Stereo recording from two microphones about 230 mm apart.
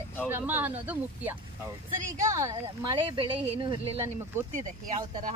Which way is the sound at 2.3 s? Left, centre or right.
Centre.